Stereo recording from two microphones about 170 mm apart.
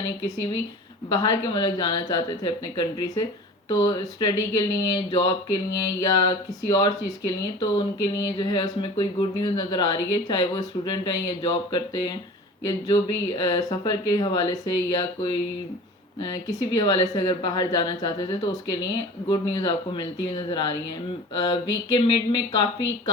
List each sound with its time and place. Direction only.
1.1 s speech: 25° left (ahead or behind)
12.6 s speech: 25° left (ahead or behind)